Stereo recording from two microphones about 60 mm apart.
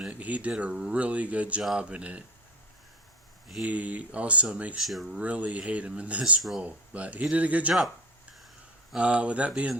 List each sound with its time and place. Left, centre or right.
0.1 s speech: right
3.6 s speech: right
4.8 s speech: centre
5.0 s speech: right
9.0 s speech: centre